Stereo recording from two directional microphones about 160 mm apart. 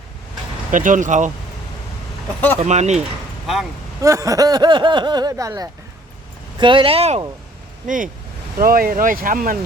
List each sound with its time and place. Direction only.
0.7 s speech: 55° right (ahead or behind)
2.6 s speech: 45° right (ahead or behind)
3.4 s speech: centre (ahead or behind)
4.0 s speech: 20° right (ahead or behind); by 7.2 s 40° right (ahead or behind)
7.9 s speech: 55° right (ahead or behind)